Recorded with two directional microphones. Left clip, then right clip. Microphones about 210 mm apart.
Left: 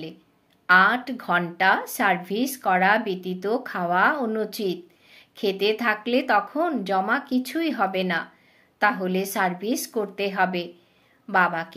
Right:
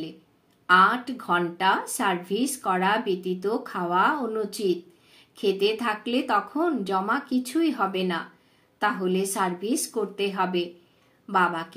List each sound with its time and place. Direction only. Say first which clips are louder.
0.7 s a woman's voice: left 1 dB; 40° left (ahead or behind)